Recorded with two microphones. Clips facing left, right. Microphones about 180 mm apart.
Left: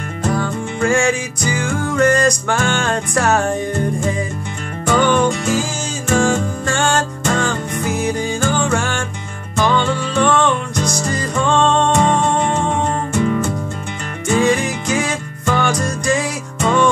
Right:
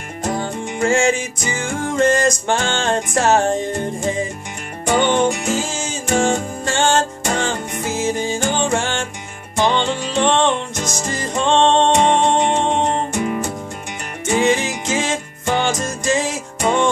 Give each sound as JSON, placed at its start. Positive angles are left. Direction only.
{"t": 0.2, "sound": "music", "side_deg": -20}
{"t": 13.2, "sound": "music", "side_deg": -15}